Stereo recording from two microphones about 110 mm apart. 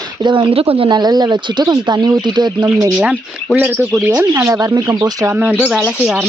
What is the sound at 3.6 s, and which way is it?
Speech, 25° right (ahead or behind).